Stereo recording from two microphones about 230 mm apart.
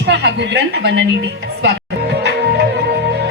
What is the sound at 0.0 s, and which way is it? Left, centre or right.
A woman's voice, right.